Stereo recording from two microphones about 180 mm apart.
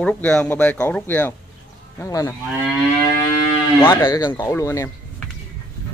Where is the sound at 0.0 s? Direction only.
5° left (ahead or behind).